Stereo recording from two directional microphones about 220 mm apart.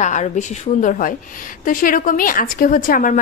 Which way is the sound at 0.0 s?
35° left (ahead or behind).